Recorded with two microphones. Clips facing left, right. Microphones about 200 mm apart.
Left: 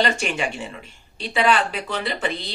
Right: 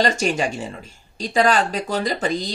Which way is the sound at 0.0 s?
40° right (ahead or behind).